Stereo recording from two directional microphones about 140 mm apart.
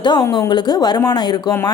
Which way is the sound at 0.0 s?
30° left (ahead or behind).